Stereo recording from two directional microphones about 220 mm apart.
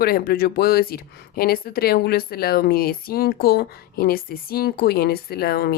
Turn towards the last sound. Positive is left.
turn(degrees=45)  # may be behind; listen again after turning